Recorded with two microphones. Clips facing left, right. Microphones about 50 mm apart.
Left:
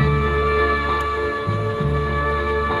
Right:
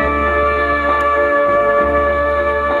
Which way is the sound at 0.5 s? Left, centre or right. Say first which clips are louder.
Right 4 dB; centre.